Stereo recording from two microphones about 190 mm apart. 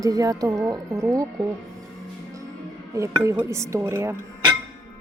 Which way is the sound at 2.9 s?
15° right (ahead or behind).